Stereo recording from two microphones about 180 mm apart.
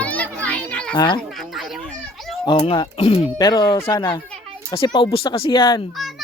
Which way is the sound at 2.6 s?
30° left (ahead or behind).